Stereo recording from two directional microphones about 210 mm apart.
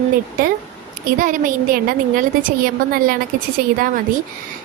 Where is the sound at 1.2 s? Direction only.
40° right (ahead or behind).